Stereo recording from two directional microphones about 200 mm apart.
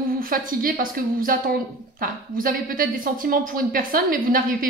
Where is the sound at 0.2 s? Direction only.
45° right (ahead or behind).